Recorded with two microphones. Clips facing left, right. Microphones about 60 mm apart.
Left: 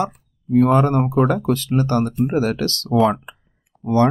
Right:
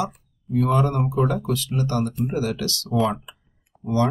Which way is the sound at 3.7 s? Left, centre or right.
Centre.